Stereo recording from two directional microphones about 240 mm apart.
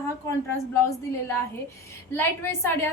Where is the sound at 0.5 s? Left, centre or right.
Centre.